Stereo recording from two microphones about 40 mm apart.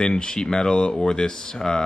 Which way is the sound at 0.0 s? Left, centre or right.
Centre.